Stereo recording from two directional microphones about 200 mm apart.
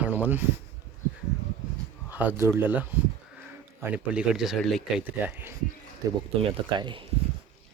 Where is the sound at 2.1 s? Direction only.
10° right (ahead or behind).